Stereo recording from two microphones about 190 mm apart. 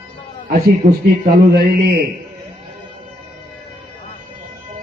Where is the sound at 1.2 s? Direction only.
50° right (ahead or behind).